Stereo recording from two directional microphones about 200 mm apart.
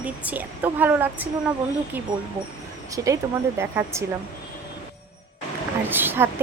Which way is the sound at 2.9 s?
15° right (ahead or behind).